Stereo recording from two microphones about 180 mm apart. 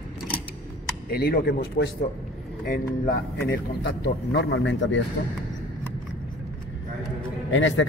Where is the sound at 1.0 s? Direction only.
55° left (ahead or behind); by 5.0 s 90° left.